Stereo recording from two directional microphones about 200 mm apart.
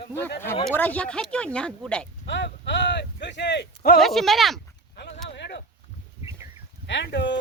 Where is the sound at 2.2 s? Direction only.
65° left (ahead or behind).